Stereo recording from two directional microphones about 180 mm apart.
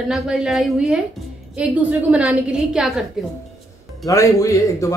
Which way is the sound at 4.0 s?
20° left (ahead or behind).